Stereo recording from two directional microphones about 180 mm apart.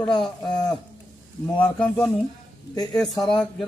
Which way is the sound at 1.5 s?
10° left (ahead or behind).